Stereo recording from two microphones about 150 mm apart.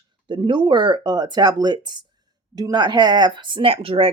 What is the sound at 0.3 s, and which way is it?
Speech, 35° right (ahead or behind).